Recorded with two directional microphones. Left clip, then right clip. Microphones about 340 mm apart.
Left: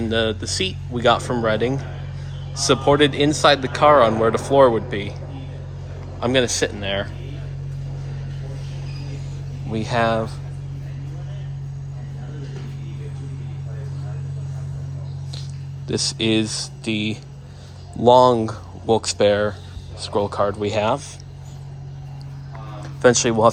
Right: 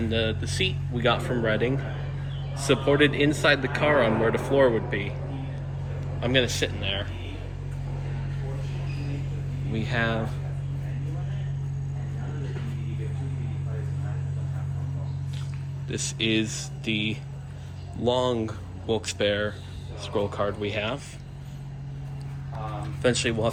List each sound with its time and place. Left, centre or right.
0.1 s speech: left
6.4 s speech: centre
9.7 s speech: centre
15.9 s speech: centre
23.0 s speech: centre